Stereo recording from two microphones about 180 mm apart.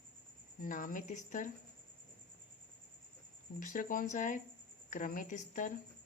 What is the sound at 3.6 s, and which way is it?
Speech, 50° left (ahead or behind).